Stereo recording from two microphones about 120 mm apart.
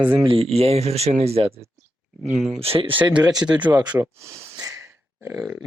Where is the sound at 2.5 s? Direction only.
50° right (ahead or behind).